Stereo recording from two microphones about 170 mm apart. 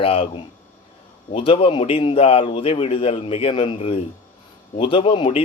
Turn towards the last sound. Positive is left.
turn(degrees=30)  # may be behind; listen again after turning